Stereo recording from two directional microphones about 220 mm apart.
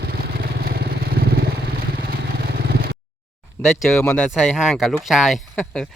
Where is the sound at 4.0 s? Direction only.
10° left (ahead or behind).